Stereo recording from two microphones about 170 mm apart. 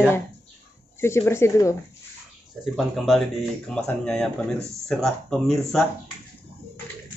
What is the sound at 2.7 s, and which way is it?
Speech, centre (ahead or behind).